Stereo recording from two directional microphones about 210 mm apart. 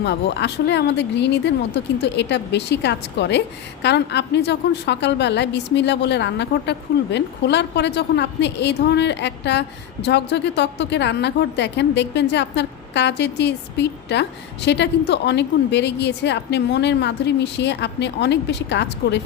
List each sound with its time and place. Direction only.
0.0 s a woman's voice: 55° left (ahead or behind)